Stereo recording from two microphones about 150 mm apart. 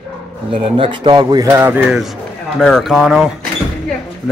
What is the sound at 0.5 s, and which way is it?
Speech, 35° right (ahead or behind).